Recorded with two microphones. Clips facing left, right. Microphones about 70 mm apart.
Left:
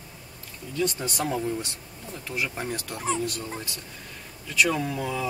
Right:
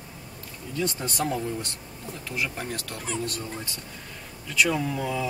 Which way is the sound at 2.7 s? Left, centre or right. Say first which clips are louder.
Left 4 dB; centre.